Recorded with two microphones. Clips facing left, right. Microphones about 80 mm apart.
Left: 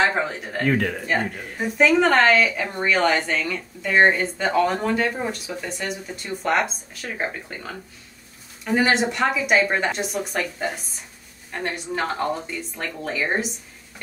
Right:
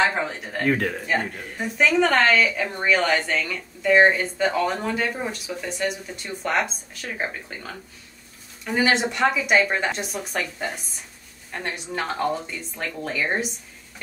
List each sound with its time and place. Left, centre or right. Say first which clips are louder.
0.1 s a woman's voice: left 2 dB; centre